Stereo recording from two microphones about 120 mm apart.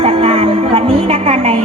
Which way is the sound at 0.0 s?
50° right (ahead or behind).